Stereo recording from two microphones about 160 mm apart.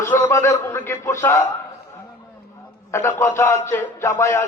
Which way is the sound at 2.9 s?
15° left (ahead or behind).